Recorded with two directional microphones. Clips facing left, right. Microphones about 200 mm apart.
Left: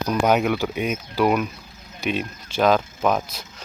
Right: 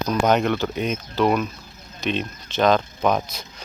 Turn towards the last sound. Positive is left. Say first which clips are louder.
# even
turn(degrees=5)  # may be behind; listen again after turning